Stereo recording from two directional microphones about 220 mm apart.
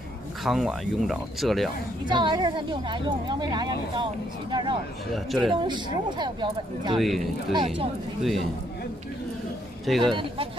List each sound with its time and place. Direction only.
0.4 s speech: centre (ahead or behind)
2.0 s speech: 20° right (ahead or behind)
5.1 s speech: centre (ahead or behind)
5.7 s speech: 20° right (ahead or behind)
7.0 s speech: centre (ahead or behind)
7.5 s speech: 25° right (ahead or behind)
8.2 s speech: centre (ahead or behind)
9.8 s speech: centre (ahead or behind)
10.1 s speech: 25° right (ahead or behind)